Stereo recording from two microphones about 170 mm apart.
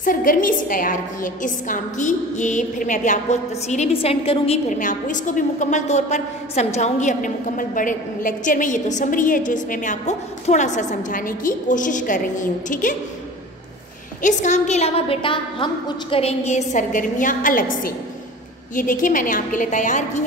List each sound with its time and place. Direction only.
0.0 s a woman's voice: 55° left (ahead or behind)
14.2 s a woman's voice: 45° left (ahead or behind)